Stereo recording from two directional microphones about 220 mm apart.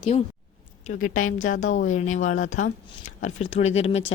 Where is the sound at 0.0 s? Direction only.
30° left (ahead or behind).